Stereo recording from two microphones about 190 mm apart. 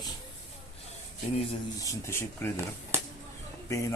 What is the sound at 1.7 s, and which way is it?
Speech, 15° left (ahead or behind).